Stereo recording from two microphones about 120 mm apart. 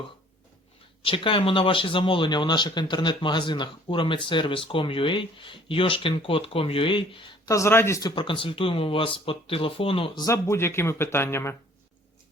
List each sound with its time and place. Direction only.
1.0 s speech: 45° left (ahead or behind)
7.4 s speech: 25° left (ahead or behind)
8.1 s speech: 45° left (ahead or behind)
10.2 s speech: 25° left (ahead or behind)